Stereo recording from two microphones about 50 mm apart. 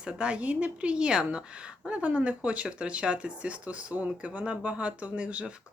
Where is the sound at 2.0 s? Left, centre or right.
Right.